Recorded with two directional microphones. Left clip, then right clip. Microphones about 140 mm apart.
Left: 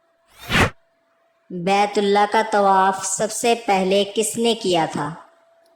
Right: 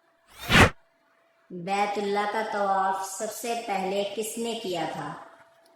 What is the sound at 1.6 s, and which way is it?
A woman's voice, 55° left (ahead or behind).